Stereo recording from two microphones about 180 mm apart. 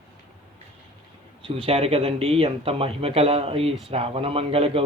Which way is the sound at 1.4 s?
30° right (ahead or behind).